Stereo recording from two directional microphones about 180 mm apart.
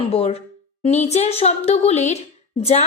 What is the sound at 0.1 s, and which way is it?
A woman's voice, 35° left (ahead or behind).